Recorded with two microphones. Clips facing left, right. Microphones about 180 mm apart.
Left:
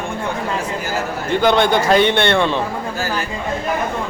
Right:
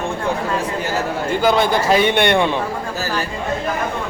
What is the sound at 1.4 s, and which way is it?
A man's voice, 5° right (ahead or behind).